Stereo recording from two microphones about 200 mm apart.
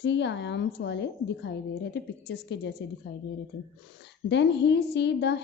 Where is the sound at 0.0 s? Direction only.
60° left (ahead or behind).